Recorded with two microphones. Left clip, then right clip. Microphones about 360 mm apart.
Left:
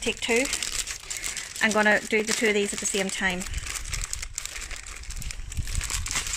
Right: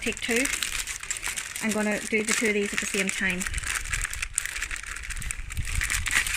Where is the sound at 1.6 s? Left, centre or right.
Left.